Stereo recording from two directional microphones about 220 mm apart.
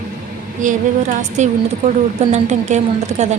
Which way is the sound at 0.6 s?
35° right (ahead or behind).